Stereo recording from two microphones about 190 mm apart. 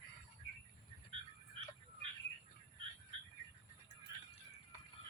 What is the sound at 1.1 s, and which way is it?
Frog, 30° right (ahead or behind).